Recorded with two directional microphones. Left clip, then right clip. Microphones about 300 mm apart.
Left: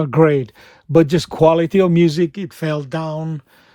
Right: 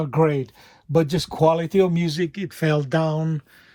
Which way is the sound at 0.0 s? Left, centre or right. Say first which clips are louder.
Left 6 dB; left.